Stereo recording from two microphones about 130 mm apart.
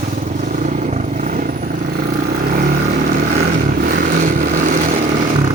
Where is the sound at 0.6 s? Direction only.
75° right (ahead or behind).